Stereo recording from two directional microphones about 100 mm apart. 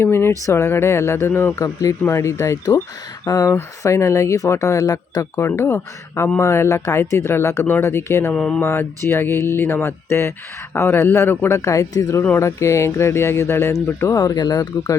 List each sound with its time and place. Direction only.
0.0 s speech: 25° left (ahead or behind)
1.5 s speech: 35° left (ahead or behind)
5.4 s speech: 30° left (ahead or behind)
8.3 s a sound: 10° left (ahead or behind)
8.6 s speech: 25° left (ahead or behind); by 14.9 s 40° left (ahead or behind)